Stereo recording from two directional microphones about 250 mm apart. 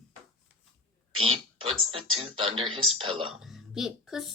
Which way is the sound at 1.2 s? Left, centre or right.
Right.